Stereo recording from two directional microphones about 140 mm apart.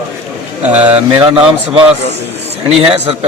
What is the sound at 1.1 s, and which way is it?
Speech, 40° right (ahead or behind).